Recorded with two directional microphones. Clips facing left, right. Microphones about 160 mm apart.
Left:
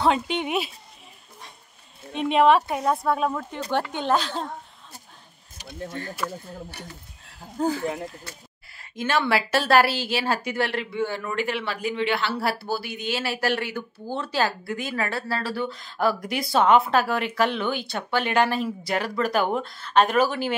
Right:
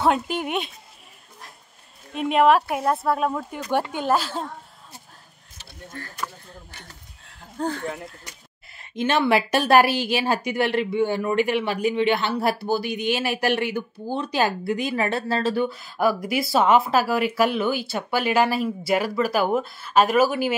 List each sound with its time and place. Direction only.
0.0 s speech: 5° right (ahead or behind)
2.1 s speech: centre (ahead or behind)
5.6 s speech: 20° left (ahead or behind)
6.8 s speech: 5° left (ahead or behind)
8.2 s speech: 20° right (ahead or behind)